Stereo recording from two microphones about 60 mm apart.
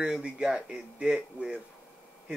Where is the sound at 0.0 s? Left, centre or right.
Centre.